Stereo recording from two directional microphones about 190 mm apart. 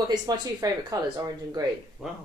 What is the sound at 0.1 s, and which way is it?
Speech, 20° right (ahead or behind).